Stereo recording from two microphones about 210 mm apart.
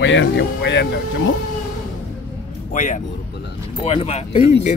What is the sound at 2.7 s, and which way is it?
Speech, 35° left (ahead or behind).